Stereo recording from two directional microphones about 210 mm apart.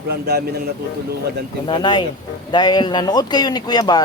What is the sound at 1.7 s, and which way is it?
Speech, 20° left (ahead or behind).